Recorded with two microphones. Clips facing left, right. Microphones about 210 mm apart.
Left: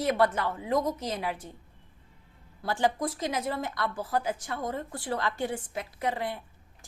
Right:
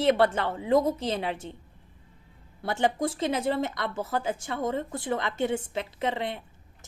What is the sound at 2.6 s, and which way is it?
A woman's voice, 25° right (ahead or behind).